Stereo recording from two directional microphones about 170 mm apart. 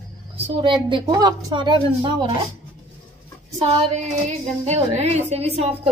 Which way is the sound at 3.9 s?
40° right (ahead or behind).